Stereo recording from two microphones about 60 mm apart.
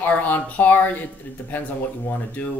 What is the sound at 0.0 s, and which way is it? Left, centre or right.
Speech, left.